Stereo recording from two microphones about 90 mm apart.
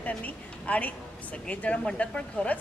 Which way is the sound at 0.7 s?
15° left (ahead or behind).